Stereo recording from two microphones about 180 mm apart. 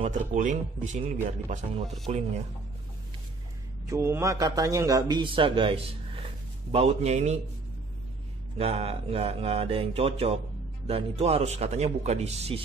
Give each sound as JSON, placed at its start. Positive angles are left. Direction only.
{"t": 0.0, "sound": "speech", "side_deg": -40}
{"t": 3.8, "sound": "a man's voice", "side_deg": -15}
{"t": 8.5, "sound": "speech", "side_deg": -35}